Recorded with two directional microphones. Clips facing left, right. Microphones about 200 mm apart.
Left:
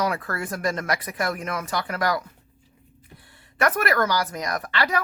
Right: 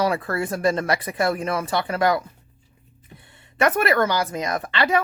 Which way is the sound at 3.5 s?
25° right (ahead or behind).